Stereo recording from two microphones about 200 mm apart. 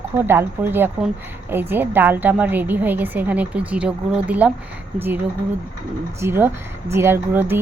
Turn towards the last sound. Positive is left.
turn(degrees=-10)  # may be behind; listen again after turning